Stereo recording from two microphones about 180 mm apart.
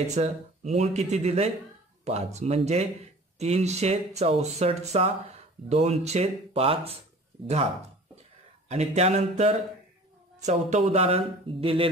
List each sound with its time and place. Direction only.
0.0 s speech: 35° right (ahead or behind)
8.6 s speech: 40° right (ahead or behind)